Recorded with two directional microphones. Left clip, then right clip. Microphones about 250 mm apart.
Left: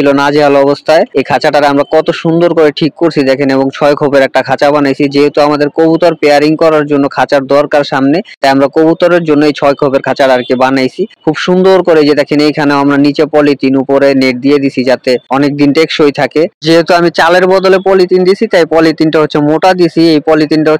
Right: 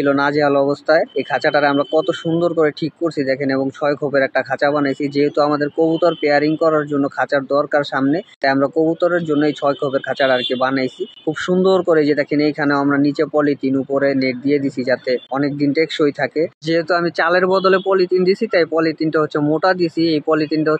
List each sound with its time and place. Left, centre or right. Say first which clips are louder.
0.0 s speech: left 9 dB; left